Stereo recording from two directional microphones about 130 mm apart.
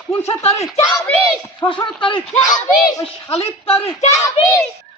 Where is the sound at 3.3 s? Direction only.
50° left (ahead or behind).